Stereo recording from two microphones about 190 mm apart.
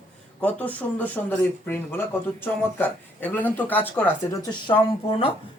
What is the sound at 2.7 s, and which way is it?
Speech, 10° left (ahead or behind).